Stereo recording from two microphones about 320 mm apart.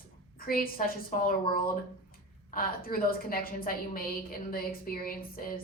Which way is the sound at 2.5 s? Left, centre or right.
Left.